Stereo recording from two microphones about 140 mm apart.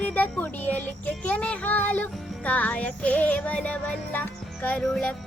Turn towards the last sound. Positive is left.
turn(degrees=5)  # may be behind; listen again after turning